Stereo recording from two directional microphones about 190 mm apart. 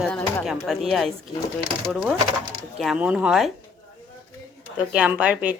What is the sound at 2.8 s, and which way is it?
Speech, 5° right (ahead or behind).